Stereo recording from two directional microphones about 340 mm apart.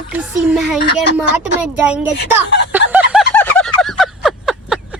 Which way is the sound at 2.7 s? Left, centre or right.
Centre.